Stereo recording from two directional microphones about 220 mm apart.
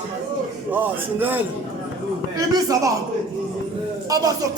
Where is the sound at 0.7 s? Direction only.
10° right (ahead or behind).